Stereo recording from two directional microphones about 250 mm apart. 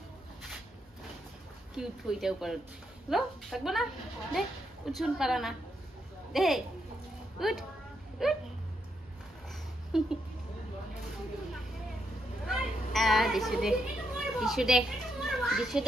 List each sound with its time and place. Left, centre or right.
1.8 s a woman's voice: centre
9.9 s a woman's voice: centre
12.4 s children playing: centre